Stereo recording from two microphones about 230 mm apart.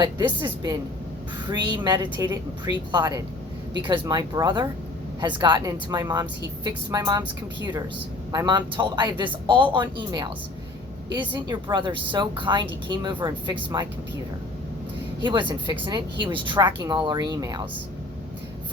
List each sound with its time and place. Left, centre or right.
0.0 s speech: centre
8.3 s speech: centre
15.2 s speech: right